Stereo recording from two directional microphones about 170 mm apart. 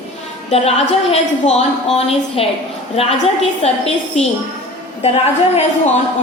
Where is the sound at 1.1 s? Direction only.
40° left (ahead or behind).